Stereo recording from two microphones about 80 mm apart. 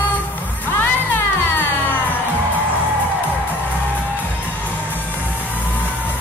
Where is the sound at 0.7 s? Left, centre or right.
Left.